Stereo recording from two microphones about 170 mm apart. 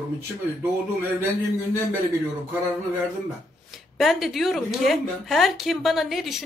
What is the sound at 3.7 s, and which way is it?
Speech, centre (ahead or behind).